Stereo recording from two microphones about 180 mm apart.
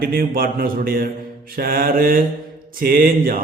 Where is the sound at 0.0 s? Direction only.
55° right (ahead or behind).